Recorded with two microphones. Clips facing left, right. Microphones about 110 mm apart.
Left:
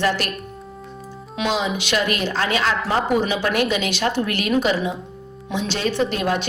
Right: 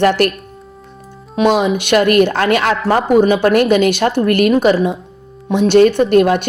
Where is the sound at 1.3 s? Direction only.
50° right (ahead or behind).